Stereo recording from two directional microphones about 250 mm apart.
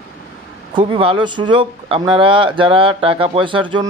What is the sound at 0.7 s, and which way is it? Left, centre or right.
Speech, centre.